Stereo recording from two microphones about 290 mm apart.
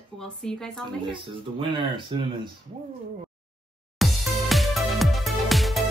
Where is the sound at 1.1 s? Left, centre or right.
Centre.